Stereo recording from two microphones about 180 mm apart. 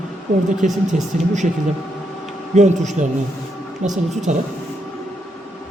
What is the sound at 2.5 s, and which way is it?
A man's voice, 40° right (ahead or behind).